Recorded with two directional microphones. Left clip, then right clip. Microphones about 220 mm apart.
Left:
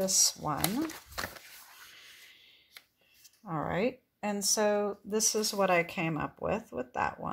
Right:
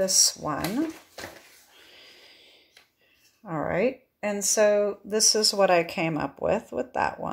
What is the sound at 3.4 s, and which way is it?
Speech, 25° left (ahead or behind).